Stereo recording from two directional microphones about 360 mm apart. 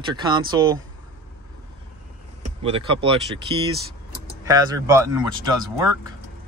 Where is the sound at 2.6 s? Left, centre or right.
Centre.